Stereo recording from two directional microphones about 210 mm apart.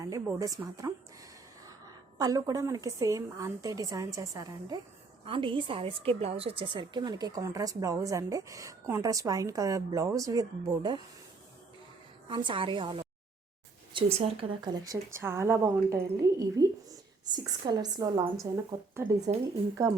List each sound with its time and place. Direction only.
0.0 s a woman's voice: 15° right (ahead or behind)
2.1 s a woman's voice: 15° right (ahead or behind)
12.3 s a woman's voice: 20° right (ahead or behind)